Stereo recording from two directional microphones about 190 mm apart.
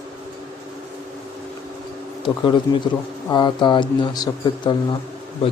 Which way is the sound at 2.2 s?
25° left (ahead or behind).